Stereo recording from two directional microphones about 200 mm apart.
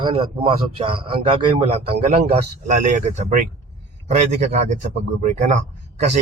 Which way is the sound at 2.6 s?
40° right (ahead or behind).